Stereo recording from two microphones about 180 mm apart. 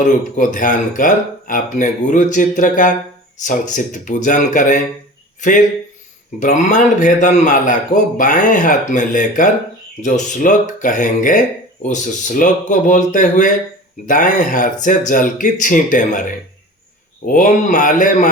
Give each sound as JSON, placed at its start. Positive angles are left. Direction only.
{"t": 0.0, "sound": "speech", "side_deg": 45}
{"t": 17.2, "sound": "speech", "side_deg": 45}